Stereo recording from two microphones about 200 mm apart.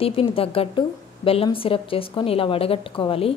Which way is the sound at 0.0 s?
30° left (ahead or behind).